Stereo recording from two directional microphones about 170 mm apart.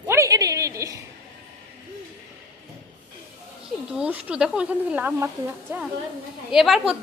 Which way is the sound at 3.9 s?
5° right (ahead or behind).